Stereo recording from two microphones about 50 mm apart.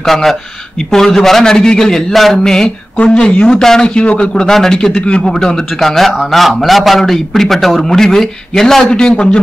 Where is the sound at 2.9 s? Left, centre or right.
Left.